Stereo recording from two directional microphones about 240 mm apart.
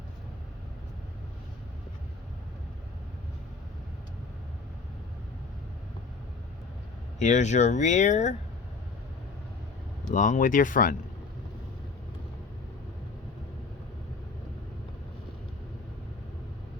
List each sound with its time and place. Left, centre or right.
7.2 s speech: left
10.1 s speech: left